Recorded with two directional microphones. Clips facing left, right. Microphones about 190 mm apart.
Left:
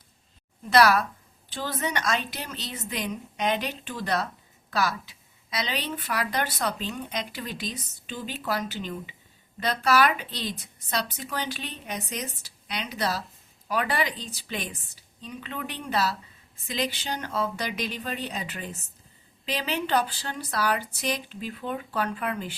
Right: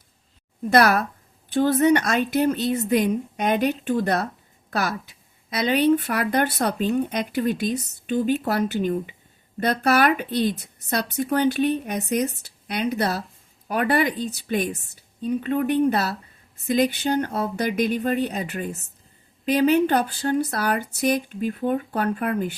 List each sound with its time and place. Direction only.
0.7 s speech: 55° right (ahead or behind)